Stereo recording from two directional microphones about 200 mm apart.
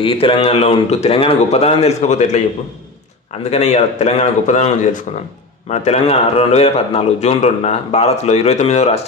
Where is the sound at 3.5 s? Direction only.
35° left (ahead or behind).